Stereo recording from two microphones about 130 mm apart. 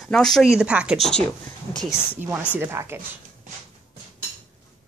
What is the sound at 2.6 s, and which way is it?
Speech, 20° right (ahead or behind).